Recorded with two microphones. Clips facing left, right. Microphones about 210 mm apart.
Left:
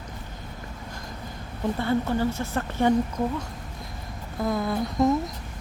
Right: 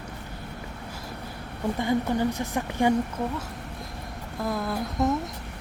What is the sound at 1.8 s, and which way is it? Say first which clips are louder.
A woman's voice: even; 15° right (ahead or behind).